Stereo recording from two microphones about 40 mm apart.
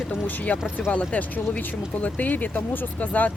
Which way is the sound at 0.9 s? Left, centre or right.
Left.